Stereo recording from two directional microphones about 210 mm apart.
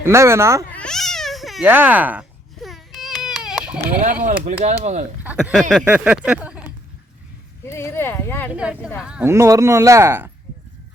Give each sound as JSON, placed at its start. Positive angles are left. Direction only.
{"t": 0.0, "sound": "speech", "side_deg": -10}
{"t": 0.7, "sound": "baby cry", "side_deg": 5}
{"t": 4.0, "sound": "speech", "side_deg": -40}
{"t": 5.2, "sound": "speech", "side_deg": -5}
{"t": 7.6, "sound": "speech", "side_deg": 10}
{"t": 8.5, "sound": "speech", "side_deg": -5}